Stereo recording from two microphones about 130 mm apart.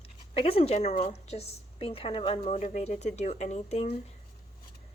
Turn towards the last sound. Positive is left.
turn(degrees=55)  # may be behind; listen again after turning